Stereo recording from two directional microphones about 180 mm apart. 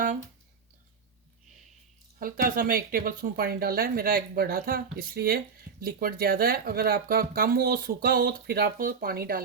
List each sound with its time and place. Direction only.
2.1 s speech: 50° right (ahead or behind)